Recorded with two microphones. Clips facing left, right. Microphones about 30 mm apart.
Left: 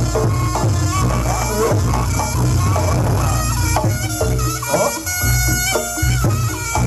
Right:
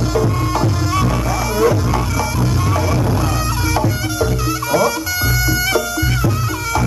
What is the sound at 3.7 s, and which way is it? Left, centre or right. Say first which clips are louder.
Music: right 1 dB; centre.